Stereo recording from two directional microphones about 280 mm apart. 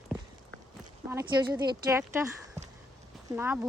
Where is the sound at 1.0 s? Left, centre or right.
Centre.